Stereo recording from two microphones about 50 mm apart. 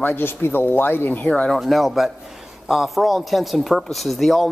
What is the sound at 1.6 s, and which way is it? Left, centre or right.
Speech, centre.